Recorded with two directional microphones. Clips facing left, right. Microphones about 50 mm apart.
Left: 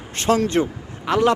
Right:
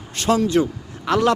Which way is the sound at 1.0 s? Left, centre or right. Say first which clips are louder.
Even; centre.